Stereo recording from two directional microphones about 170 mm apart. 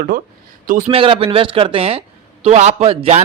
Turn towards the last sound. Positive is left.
turn(degrees=-35)  # may be behind; listen again after turning